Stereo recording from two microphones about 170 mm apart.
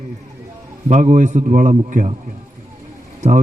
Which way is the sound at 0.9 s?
45° right (ahead or behind).